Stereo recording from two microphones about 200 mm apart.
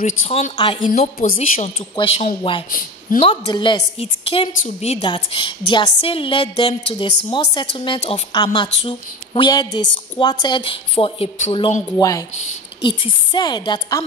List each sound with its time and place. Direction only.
0.2 s speech: 35° left (ahead or behind)
0.6 s a woman's voice: 25° left (ahead or behind)